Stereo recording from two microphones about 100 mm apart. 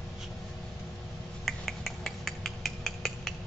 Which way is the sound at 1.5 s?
Centre (ahead or behind).